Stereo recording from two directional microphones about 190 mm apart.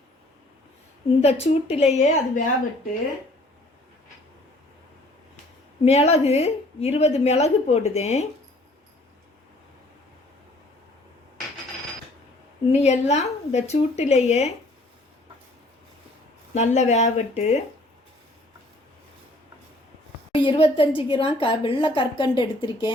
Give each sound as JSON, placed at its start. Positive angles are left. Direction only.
{"t": 1.2, "sound": "a woman's voice", "side_deg": 35}
{"t": 5.8, "sound": "a woman's voice", "side_deg": 35}
{"t": 12.8, "sound": "a woman's voice", "side_deg": 35}
{"t": 16.6, "sound": "a woman's voice", "side_deg": 35}
{"t": 20.3, "sound": "a woman's voice", "side_deg": 30}